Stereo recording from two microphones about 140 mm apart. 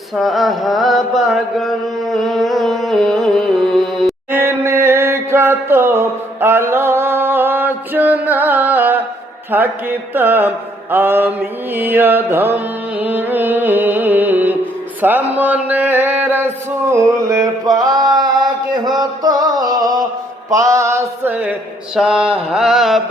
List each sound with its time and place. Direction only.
0.2 s mantra: centre (ahead or behind)
4.3 s a sound: 15° right (ahead or behind)
9.5 s music: 15° right (ahead or behind)
10.9 s mantra: 15° right (ahead or behind)
18.9 s music: 25° right (ahead or behind)
20.5 s mantra: 25° right (ahead or behind); by 23.0 s 5° right (ahead or behind)